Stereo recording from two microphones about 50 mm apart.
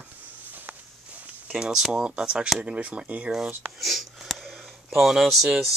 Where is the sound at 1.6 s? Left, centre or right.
Centre.